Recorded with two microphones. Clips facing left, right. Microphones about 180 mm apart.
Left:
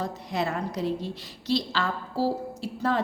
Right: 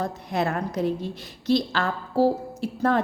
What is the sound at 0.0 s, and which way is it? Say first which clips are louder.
A woman's voice: right 3 dB; 50° right (ahead or behind).